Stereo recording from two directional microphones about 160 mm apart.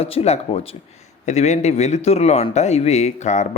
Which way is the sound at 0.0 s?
40° left (ahead or behind).